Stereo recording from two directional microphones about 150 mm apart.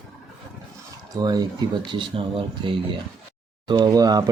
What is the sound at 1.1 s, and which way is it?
Speech, 25° right (ahead or behind).